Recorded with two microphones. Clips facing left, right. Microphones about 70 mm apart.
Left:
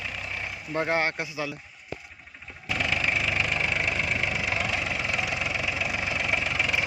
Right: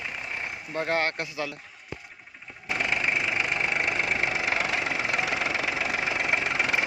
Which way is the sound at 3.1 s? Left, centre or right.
Centre.